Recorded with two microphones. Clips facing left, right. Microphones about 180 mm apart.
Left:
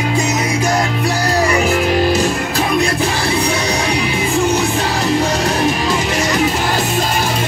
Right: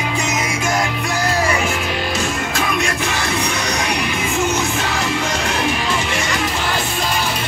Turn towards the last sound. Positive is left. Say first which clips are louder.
# left 4 dB
turn(degrees=40)  # may be behind; listen again after turning